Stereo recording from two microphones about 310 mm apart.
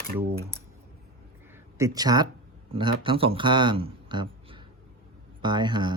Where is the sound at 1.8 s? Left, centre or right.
Centre.